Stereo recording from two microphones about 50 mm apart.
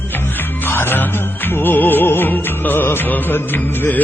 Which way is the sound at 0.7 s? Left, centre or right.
Left.